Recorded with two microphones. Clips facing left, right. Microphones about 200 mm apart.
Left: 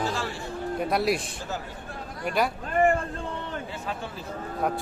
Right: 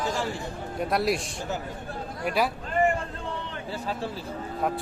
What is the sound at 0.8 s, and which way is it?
Speech, centre (ahead or behind).